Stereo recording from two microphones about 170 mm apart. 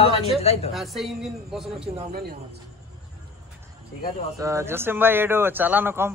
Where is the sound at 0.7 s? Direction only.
Centre (ahead or behind).